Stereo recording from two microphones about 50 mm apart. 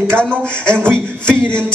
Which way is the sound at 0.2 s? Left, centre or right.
Centre.